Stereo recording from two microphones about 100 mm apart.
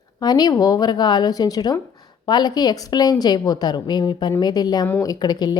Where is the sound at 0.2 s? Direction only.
40° left (ahead or behind).